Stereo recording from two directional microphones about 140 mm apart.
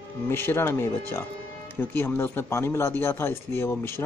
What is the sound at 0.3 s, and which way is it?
Speech, 15° left (ahead or behind).